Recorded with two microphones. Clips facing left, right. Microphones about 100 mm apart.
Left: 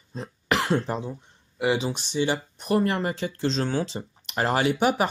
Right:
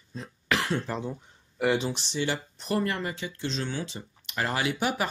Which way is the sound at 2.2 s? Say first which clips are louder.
Left 5 dB; 20° left (ahead or behind).